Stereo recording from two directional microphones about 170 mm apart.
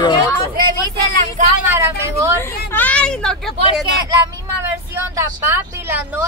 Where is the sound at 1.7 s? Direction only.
15° right (ahead or behind).